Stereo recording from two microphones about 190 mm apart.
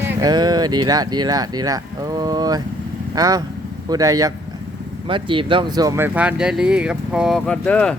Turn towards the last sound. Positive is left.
turn(degrees=5)  # may be behind; listen again after turning